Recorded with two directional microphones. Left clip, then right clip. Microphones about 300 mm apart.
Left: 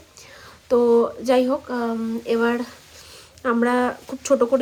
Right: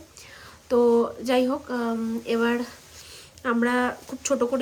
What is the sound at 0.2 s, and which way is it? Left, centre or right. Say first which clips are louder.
A woman's voice: left 3 dB; centre.